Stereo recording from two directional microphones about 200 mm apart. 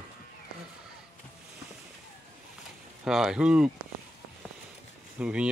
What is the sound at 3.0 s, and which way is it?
Speech, 5° right (ahead or behind).